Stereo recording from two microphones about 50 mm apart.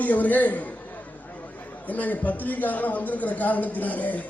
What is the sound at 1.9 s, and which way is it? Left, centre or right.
A man's voice, left.